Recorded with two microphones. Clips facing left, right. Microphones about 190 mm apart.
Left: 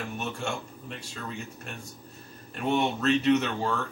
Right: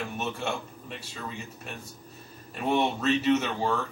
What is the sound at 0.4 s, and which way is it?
Speech, 5° right (ahead or behind).